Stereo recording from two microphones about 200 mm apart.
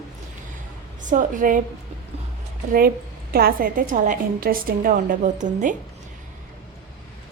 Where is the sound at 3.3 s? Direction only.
45° right (ahead or behind).